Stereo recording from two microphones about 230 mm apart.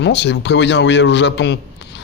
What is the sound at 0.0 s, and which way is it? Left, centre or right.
A man's voice, left.